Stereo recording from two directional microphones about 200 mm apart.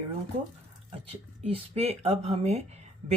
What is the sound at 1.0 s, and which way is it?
Speech, 30° right (ahead or behind).